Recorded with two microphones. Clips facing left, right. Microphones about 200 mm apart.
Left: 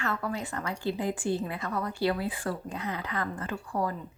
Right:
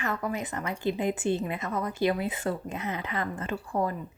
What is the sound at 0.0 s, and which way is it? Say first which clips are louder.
A woman's voice: right 1 dB; 15° right (ahead or behind).